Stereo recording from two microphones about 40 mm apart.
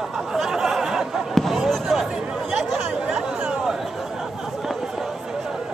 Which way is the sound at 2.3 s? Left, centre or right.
Centre.